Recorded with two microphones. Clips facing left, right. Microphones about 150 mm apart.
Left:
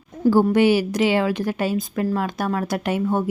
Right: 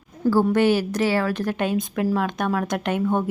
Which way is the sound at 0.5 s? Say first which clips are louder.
Left 2 dB; 10° left (ahead or behind).